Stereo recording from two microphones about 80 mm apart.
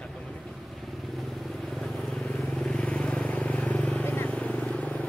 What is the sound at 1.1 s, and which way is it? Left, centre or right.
Vehicle, centre.